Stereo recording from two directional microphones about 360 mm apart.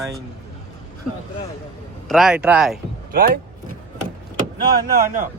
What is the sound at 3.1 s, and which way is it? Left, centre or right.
Speech, right.